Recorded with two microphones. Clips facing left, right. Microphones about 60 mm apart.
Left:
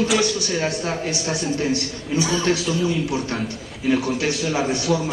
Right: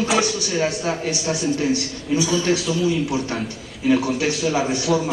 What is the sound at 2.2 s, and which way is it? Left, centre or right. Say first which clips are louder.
Speech: left 1 dB; left.